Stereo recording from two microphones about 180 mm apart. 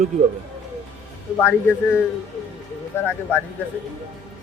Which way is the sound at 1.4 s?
10° left (ahead or behind).